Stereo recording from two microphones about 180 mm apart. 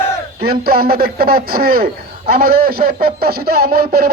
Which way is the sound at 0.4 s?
60° right (ahead or behind).